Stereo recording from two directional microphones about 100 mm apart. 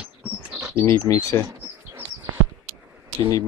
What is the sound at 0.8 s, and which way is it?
Speech, 25° left (ahead or behind).